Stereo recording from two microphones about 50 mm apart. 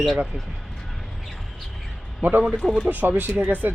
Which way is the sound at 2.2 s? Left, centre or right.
Right.